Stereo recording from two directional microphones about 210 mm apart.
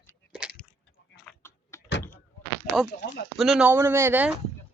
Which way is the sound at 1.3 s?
10° left (ahead or behind).